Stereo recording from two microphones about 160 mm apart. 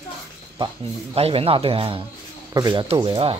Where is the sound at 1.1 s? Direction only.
40° right (ahead or behind).